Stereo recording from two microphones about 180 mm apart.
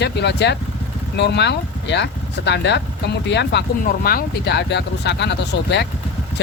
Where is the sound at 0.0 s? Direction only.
70° left (ahead or behind).